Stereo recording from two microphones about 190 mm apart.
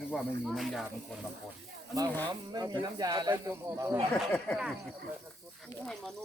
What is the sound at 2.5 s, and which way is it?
Speech, 20° right (ahead or behind).